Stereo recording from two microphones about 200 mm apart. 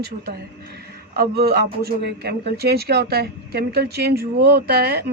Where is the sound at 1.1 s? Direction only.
50° right (ahead or behind).